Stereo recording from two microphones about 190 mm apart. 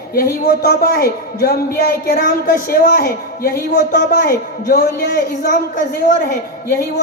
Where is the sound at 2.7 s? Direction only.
45° left (ahead or behind).